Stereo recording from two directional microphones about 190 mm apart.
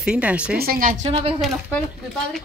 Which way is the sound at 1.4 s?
Centre (ahead or behind).